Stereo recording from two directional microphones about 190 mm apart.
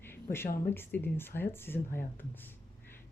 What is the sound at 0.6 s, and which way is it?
Speech, 10° left (ahead or behind).